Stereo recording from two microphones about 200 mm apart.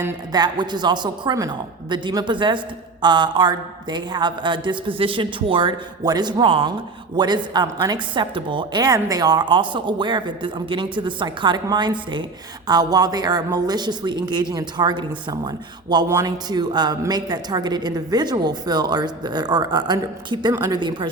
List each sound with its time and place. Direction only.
0.0 s speech: 20° right (ahead or behind)